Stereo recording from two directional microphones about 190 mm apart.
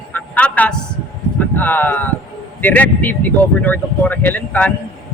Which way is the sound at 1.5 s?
10° left (ahead or behind).